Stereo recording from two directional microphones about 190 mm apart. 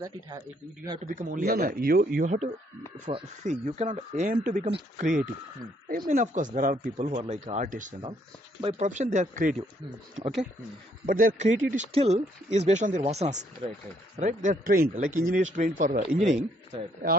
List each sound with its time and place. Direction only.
1.0 s speech: 45° right (ahead or behind)
2.1 s speech: 40° right (ahead or behind)
11.1 s speech: 45° right (ahead or behind)